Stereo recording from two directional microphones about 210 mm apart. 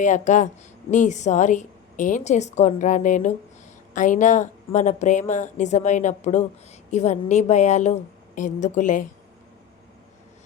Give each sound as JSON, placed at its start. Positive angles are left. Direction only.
{"t": 0.0, "sound": "a woman's voice", "side_deg": 35}